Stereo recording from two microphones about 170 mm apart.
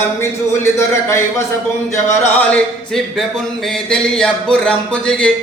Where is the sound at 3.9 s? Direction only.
5° left (ahead or behind).